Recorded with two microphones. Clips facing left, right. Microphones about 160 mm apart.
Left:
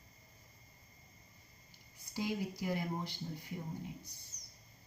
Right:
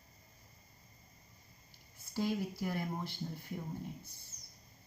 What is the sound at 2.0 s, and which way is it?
Speech, 15° left (ahead or behind).